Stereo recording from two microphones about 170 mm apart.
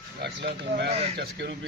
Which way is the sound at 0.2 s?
75° right (ahead or behind).